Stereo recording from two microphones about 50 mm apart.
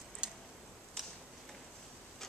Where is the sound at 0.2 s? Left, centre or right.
Centre.